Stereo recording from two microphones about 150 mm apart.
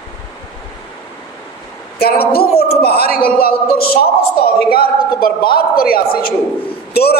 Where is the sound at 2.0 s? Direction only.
90° left.